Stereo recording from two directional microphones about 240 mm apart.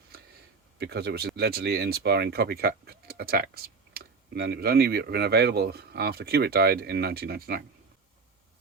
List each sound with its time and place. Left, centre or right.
0.8 s speech: right